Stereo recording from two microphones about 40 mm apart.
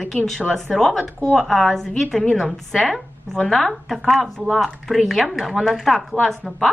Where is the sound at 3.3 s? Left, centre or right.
Centre.